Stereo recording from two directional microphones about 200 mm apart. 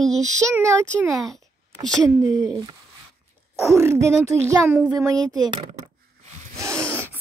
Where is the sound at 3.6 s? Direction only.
15° right (ahead or behind).